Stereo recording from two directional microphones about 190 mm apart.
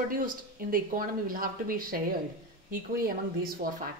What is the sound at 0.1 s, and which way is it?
Speech, 50° right (ahead or behind).